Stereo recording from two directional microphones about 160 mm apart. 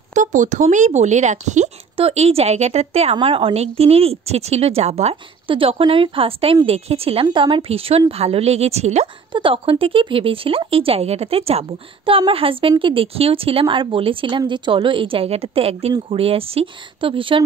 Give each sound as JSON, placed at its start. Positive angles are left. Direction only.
{"t": 0.1, "sound": "speech", "side_deg": -50}